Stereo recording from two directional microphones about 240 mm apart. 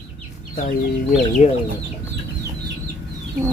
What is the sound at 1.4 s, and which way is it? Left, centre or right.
Speech, left.